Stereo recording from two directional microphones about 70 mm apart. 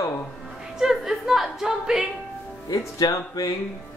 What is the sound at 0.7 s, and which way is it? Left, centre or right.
Speech, centre.